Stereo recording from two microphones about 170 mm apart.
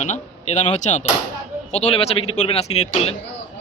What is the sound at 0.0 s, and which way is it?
Speech, 45° left (ahead or behind).